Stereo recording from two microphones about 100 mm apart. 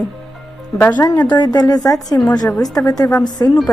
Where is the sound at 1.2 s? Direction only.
45° left (ahead or behind).